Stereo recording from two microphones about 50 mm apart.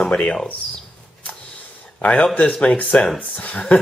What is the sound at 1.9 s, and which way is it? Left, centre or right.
Speech, left.